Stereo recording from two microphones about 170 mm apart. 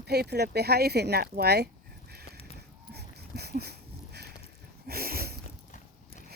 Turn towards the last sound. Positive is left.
turn(degrees=-65)  # may be behind; listen again after turning